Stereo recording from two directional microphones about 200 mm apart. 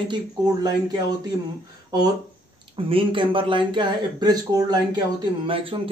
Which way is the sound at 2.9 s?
25° right (ahead or behind).